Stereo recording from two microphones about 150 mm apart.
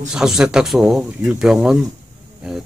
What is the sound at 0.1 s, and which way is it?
Speech, 5° right (ahead or behind).